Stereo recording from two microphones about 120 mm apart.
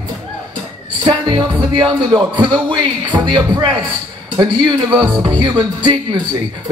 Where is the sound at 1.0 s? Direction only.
40° right (ahead or behind).